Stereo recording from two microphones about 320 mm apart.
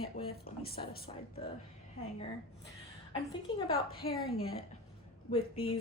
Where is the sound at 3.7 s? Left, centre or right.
Left.